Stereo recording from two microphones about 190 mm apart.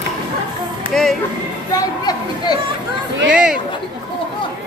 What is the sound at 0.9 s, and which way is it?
Music, 5° left (ahead or behind).